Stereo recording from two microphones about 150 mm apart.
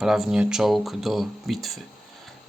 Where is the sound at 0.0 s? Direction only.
Centre (ahead or behind).